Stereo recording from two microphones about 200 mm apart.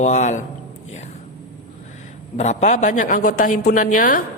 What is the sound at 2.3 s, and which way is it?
A man's voice, 35° left (ahead or behind).